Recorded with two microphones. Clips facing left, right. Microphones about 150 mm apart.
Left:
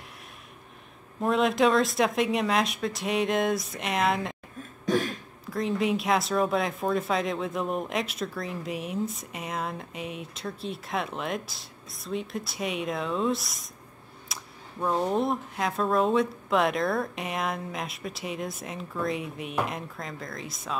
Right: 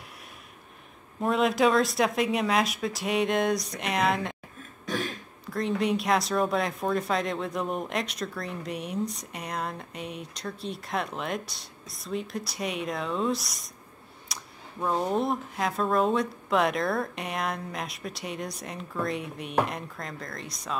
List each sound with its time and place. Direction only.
1.2 s speech: centre (ahead or behind)
4.8 s a sound: 45° left (ahead or behind)
5.5 s speech: centre (ahead or behind)